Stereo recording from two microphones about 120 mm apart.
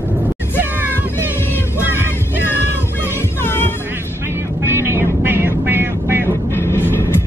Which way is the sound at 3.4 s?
20° left (ahead or behind).